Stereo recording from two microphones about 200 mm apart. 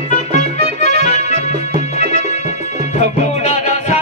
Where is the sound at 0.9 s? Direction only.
35° left (ahead or behind).